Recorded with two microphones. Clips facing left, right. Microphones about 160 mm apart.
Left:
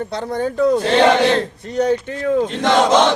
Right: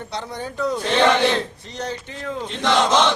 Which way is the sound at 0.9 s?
35° left (ahead or behind).